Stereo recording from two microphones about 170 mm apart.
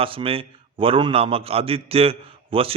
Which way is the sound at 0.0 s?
35° right (ahead or behind).